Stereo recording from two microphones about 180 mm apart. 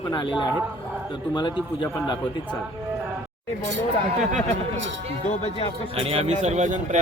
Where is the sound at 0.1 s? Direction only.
25° left (ahead or behind).